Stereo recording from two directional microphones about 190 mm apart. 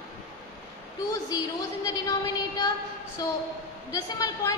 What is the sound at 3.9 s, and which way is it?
Speech, 20° left (ahead or behind).